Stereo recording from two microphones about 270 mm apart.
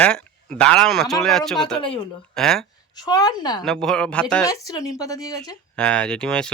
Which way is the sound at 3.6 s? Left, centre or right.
Centre.